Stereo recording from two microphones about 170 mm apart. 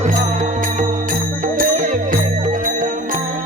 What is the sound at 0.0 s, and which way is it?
Music, 45° right (ahead or behind).